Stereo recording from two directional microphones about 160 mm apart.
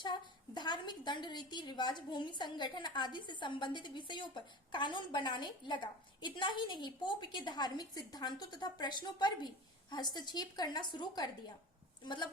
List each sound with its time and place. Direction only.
0.0 s a woman's voice: 25° left (ahead or behind)